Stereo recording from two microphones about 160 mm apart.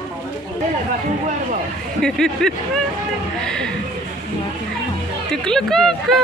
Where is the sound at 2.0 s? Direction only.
5° left (ahead or behind).